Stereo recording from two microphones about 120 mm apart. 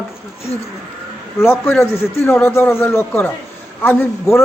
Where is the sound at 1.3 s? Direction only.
20° left (ahead or behind).